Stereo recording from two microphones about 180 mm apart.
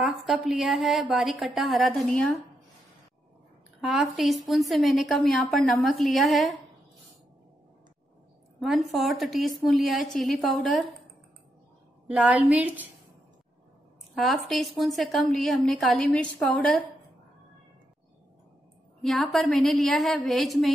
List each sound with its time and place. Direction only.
0.0 s a sound: centre (ahead or behind)
0.5 s a woman's voice: centre (ahead or behind)
3.8 s a woman's voice: centre (ahead or behind)
8.5 s a woman's voice: centre (ahead or behind)
12.1 s a woman's voice: 5° right (ahead or behind)
14.1 s a woman's voice: centre (ahead or behind)
18.9 s a woman's voice: centre (ahead or behind)